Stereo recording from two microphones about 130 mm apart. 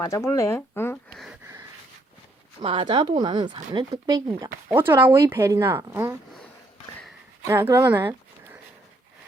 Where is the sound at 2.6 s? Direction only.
45° right (ahead or behind).